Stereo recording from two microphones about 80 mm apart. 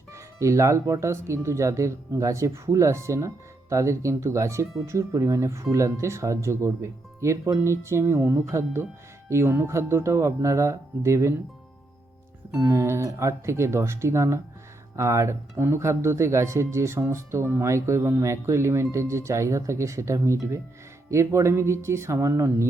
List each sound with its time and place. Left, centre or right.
0.1 s speech: right
12.5 s speech: right